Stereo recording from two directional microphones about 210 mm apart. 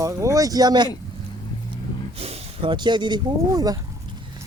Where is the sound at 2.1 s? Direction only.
30° right (ahead or behind).